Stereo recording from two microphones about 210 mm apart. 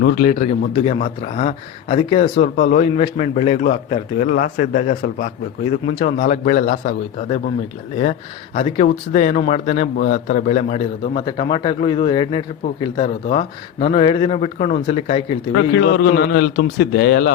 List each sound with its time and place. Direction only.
0.0 s speech: 45° left (ahead or behind)
8.5 s a man's voice: 35° left (ahead or behind)
15.5 s a man's voice: 60° left (ahead or behind)